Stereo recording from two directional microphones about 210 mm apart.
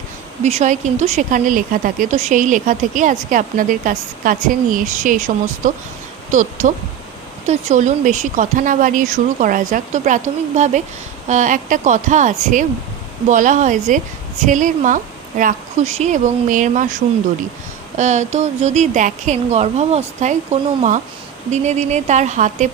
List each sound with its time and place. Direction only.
0.4 s speech: 35° right (ahead or behind)
17.9 s speech: 35° right (ahead or behind)